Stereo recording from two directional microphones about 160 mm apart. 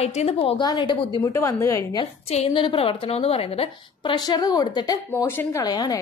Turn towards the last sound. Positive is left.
turn(degrees=25)  # may be behind; listen again after turning